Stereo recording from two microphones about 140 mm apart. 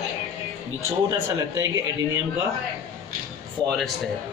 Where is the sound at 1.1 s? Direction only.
20° right (ahead or behind).